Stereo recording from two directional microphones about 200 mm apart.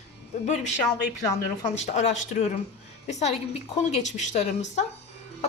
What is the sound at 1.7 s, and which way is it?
A woman's voice, 35° left (ahead or behind).